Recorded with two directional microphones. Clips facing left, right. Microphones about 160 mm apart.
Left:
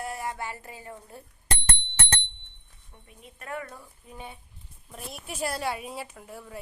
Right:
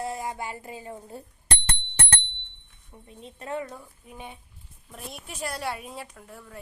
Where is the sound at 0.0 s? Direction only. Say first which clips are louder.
Right 2 dB; 20° right (ahead or behind).